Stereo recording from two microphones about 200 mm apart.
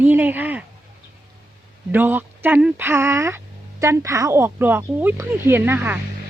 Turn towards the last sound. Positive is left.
turn(degrees=-10)  # may be behind; listen again after turning